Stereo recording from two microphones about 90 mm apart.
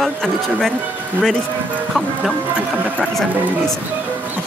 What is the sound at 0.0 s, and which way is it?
Speech, 5° left (ahead or behind).